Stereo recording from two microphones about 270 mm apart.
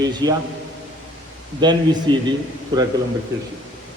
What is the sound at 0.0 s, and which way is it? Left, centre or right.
Speech, centre.